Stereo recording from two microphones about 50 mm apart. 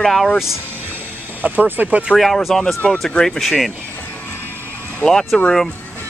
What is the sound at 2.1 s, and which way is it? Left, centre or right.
Speech, centre.